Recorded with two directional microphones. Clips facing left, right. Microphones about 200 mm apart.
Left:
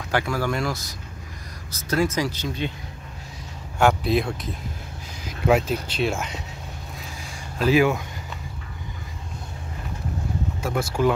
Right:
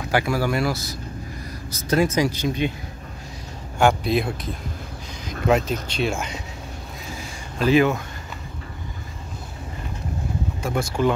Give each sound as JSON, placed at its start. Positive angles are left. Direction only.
{"t": 0.1, "sound": "speech", "side_deg": -10}
{"t": 1.7, "sound": "speech", "side_deg": -20}
{"t": 3.7, "sound": "speech", "side_deg": 0}
{"t": 7.5, "sound": "speech", "side_deg": 5}
{"t": 10.6, "sound": "speech", "side_deg": 5}